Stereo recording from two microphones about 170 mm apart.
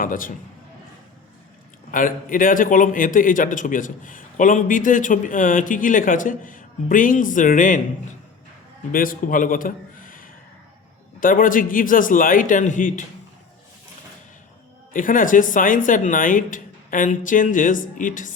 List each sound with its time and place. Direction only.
0.0 s a man's voice: 55° left (ahead or behind)
1.9 s a man's voice: 50° left (ahead or behind)
8.9 s a man's voice: 55° left (ahead or behind)
14.9 s a man's voice: 50° left (ahead or behind)